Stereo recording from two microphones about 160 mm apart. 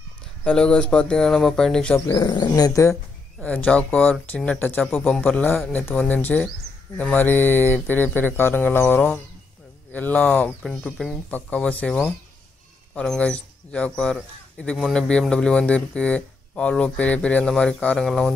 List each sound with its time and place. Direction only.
0.4 s speech: 5° left (ahead or behind)
2.0 s speech: 25° left (ahead or behind)
3.3 s speech: 5° left (ahead or behind)